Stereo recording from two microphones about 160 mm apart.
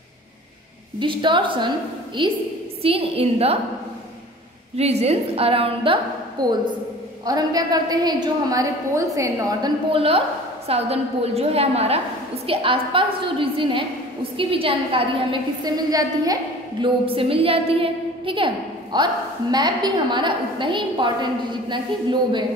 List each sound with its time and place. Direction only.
0.9 s a woman's voice: 30° right (ahead or behind)
4.7 s a woman's voice: 40° right (ahead or behind); by 9.7 s 20° right (ahead or behind)
9.8 s a woman's voice: 35° right (ahead or behind)
16.8 s a woman's voice: 35° right (ahead or behind)